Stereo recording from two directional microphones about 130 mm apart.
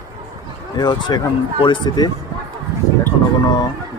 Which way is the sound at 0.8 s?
35° left (ahead or behind).